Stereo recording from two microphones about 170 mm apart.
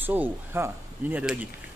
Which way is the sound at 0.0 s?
10° right (ahead or behind).